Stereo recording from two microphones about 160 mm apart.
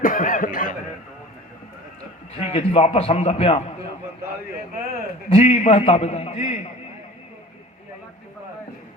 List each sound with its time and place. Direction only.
0.0 s chuckle: 60° left (ahead or behind)
2.3 s a man's voice: 35° left (ahead or behind)
5.3 s a man's voice: 40° left (ahead or behind)